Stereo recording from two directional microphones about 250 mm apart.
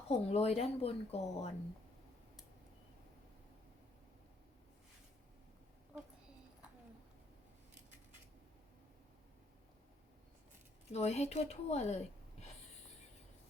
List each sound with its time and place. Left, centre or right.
0.1 s speech: left
10.9 s speech: left